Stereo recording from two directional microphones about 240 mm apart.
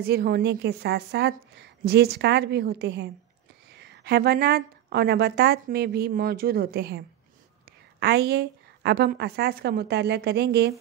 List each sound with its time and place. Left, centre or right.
0.0 s a woman's voice: right
8.0 s a woman's voice: right